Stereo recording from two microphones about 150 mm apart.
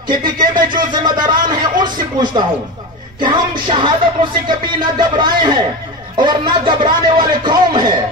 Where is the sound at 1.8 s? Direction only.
30° right (ahead or behind).